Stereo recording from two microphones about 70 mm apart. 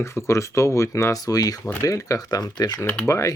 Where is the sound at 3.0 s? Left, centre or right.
Left.